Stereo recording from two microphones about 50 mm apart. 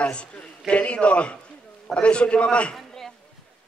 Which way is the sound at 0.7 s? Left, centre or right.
Left.